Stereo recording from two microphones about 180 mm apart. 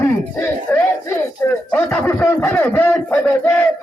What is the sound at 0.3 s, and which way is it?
Speech, 10° left (ahead or behind).